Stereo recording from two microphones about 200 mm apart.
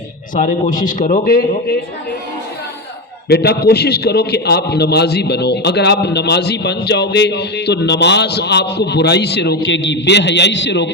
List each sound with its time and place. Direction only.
0.3 s a man's voice: 40° left (ahead or behind)
3.2 s a man's voice: 55° left (ahead or behind)